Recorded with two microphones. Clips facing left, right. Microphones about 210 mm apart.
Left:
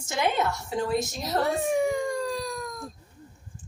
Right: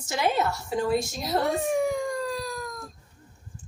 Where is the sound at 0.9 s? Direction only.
10° right (ahead or behind).